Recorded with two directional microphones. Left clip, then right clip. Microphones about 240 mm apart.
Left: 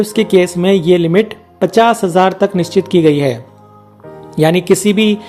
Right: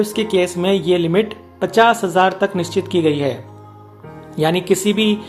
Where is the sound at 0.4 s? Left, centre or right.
Left.